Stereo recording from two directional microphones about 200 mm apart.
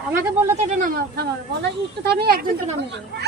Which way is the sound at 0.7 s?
40° right (ahead or behind).